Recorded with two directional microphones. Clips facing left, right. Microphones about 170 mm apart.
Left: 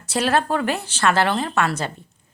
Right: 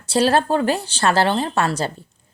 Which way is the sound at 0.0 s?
30° right (ahead or behind).